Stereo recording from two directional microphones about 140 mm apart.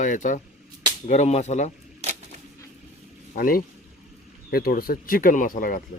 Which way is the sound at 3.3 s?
90° left.